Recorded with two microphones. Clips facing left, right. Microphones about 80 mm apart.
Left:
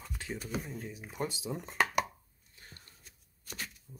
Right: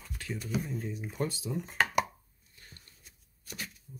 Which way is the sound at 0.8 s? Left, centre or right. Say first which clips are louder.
Right 3 dB; centre.